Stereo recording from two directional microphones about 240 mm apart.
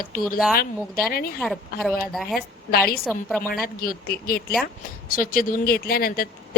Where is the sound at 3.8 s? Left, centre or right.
Left.